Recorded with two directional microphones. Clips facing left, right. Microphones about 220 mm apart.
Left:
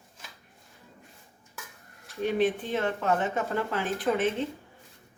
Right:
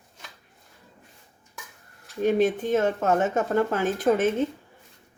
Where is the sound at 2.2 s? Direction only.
45° right (ahead or behind).